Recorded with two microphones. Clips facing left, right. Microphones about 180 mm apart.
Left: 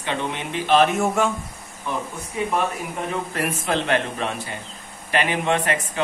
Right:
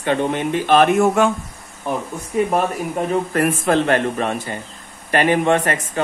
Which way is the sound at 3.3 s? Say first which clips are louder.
Right 7 dB; 50° right (ahead or behind).